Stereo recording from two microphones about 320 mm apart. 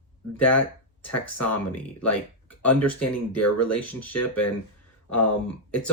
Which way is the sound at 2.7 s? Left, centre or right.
Left.